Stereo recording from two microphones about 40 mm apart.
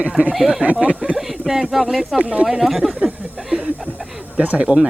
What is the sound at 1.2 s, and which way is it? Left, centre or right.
Speech, centre.